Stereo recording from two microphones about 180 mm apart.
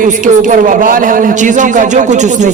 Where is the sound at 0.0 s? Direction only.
45° right (ahead or behind).